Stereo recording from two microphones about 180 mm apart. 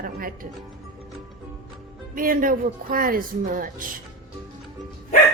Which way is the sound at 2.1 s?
50° right (ahead or behind).